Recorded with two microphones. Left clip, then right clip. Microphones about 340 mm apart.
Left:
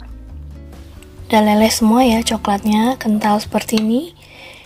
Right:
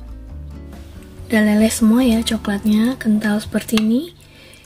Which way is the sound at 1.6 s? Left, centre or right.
Centre.